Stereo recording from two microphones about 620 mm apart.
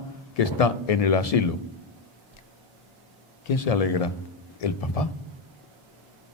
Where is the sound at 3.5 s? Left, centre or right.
Left.